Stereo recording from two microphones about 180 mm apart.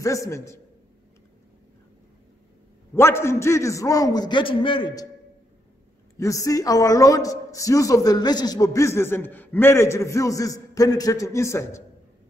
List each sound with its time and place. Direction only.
0.0 s speech: 15° left (ahead or behind)
2.9 s a man's voice: 15° left (ahead or behind)
6.1 s speech: 20° left (ahead or behind)